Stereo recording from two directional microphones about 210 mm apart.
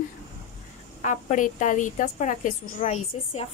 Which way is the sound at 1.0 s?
35° left (ahead or behind).